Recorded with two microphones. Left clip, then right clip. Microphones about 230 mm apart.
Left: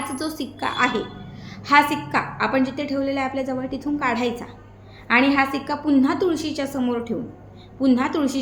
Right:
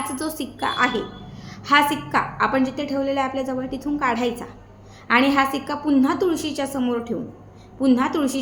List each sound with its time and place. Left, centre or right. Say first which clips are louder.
0.1 s a woman's voice: even; centre